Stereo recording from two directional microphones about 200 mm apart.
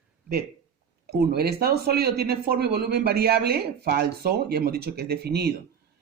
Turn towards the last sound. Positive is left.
turn(degrees=-50)  # may be behind; listen again after turning